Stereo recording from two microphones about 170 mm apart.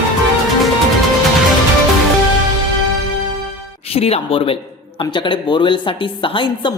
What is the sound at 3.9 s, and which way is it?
A woman's voice, 35° left (ahead or behind).